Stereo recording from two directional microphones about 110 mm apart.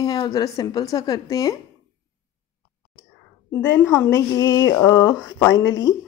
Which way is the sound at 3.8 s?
25° left (ahead or behind).